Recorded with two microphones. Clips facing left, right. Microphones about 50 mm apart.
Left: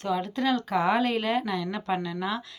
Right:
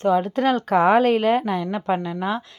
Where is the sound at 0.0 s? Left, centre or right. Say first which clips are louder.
Right 9 dB; right.